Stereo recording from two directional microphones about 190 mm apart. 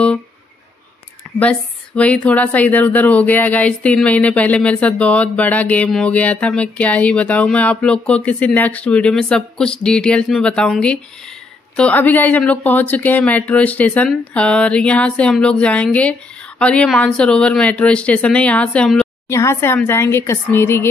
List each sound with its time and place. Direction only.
1.4 s speech: 5° left (ahead or behind)